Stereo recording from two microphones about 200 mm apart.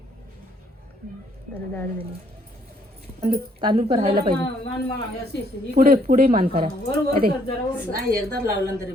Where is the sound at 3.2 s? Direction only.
30° right (ahead or behind).